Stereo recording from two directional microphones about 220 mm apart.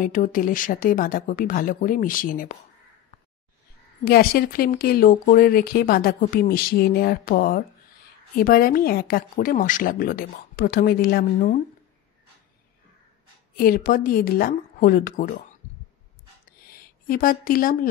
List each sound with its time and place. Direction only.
0.0 s speech: 35° left (ahead or behind)
4.0 s speech: 45° left (ahead or behind)
13.6 s speech: 40° left (ahead or behind)
16.6 s a sound: 40° left (ahead or behind)